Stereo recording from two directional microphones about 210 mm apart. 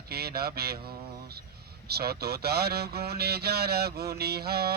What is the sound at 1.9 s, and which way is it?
Music, 50° right (ahead or behind).